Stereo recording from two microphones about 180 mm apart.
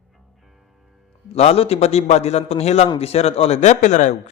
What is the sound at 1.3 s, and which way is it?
Speech, 35° left (ahead or behind).